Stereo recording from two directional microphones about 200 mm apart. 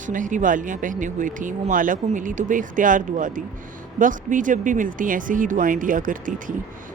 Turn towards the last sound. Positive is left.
turn(degrees=-40)  # may be behind; listen again after turning